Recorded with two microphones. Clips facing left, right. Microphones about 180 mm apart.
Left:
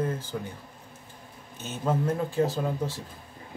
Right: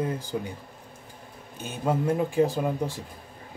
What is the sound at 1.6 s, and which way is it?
Speech, 10° right (ahead or behind).